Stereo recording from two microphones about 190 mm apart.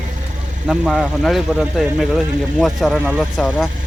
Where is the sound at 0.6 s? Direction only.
5° right (ahead or behind).